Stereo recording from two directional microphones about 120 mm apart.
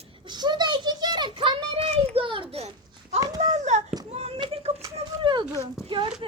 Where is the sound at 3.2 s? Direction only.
35° right (ahead or behind).